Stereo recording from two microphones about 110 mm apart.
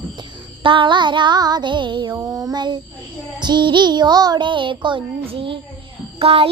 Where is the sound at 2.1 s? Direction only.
35° right (ahead or behind).